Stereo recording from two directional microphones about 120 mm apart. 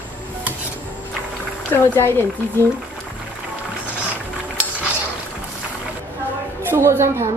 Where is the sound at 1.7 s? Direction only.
20° left (ahead or behind).